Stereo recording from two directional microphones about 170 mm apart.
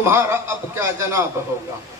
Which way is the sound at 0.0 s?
15° right (ahead or behind).